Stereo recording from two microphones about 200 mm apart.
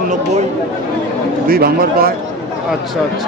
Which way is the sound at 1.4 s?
50° right (ahead or behind).